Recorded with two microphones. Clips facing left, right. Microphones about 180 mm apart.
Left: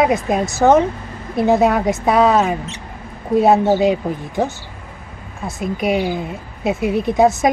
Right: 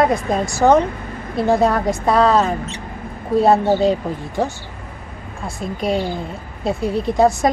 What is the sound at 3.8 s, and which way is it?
Speech, 20° left (ahead or behind).